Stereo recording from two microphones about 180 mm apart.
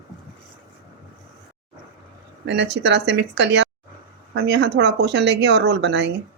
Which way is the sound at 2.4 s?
75° right (ahead or behind).